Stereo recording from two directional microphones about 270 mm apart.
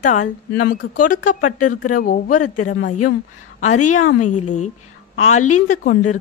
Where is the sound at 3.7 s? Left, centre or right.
Left.